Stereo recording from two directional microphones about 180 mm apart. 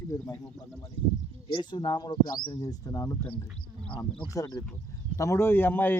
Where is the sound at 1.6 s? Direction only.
25° left (ahead or behind).